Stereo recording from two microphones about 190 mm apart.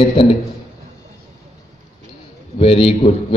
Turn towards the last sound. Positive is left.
turn(degrees=30)  # may be behind; listen again after turning